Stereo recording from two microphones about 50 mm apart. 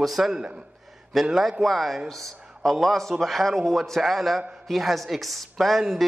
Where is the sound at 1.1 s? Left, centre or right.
Centre.